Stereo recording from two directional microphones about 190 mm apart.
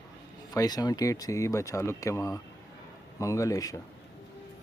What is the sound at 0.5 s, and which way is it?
Speech, 20° left (ahead or behind).